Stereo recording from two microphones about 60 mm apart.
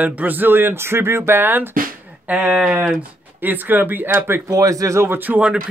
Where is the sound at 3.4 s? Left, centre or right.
Right.